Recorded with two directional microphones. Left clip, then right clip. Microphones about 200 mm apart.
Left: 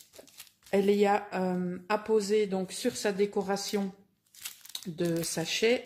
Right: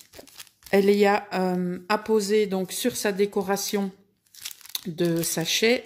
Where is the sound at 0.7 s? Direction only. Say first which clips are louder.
Right 6 dB; 35° right (ahead or behind).